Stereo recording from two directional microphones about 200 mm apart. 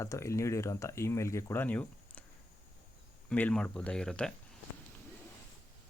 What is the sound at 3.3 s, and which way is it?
Speech, 5° left (ahead or behind).